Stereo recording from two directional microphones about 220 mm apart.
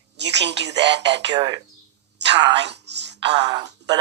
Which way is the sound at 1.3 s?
20° right (ahead or behind).